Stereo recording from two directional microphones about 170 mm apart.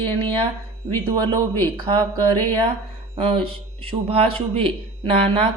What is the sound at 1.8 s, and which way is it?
Speech, 30° right (ahead or behind).